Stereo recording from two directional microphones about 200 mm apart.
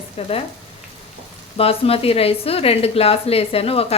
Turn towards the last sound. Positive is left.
turn(degrees=30)  # may be behind; listen again after turning